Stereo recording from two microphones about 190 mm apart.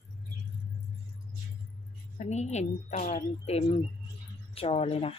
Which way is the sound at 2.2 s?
35° left (ahead or behind).